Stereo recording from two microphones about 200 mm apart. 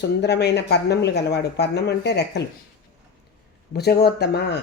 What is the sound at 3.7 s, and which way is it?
Speech, 55° left (ahead or behind).